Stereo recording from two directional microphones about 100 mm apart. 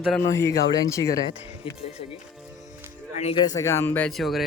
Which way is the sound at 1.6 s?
60° left (ahead or behind).